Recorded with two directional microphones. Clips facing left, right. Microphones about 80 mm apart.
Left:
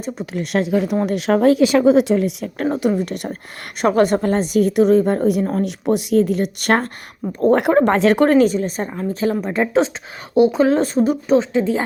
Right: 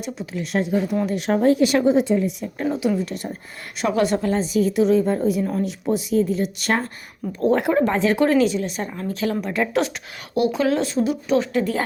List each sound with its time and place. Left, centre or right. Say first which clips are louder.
0.0 s a woman's voice: left 4 dB; left
0.5 s speech: left 3 dB; left
2.6 s a woman's voice: left 3 dB; left
3.8 s a woman's voice: left 5 dB; left
7.9 s speech: left 5 dB; left
8.2 s speech: left 4 dB; left
11.3 s speech: left 3 dB; left